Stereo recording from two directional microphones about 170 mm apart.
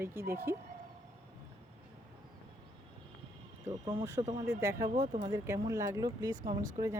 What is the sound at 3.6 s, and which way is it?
Speech, 20° right (ahead or behind).